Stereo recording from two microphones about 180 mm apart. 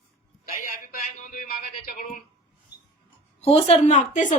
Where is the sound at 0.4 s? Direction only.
55° left (ahead or behind).